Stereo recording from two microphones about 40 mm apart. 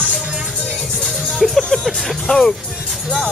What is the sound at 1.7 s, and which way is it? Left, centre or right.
Music, centre.